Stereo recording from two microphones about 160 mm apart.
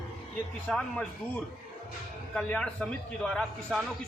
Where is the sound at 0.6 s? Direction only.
5° left (ahead or behind).